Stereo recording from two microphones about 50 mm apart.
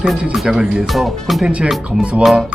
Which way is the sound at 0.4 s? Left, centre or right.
Centre.